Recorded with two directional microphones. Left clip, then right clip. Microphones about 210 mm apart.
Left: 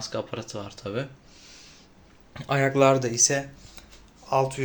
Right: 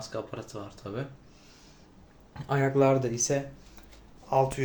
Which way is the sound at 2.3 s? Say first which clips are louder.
Left 4 dB; 20° left (ahead or behind).